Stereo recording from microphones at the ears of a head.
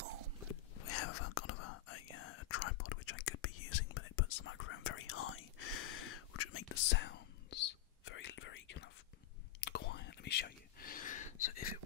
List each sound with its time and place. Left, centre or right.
0.7 s whispering: left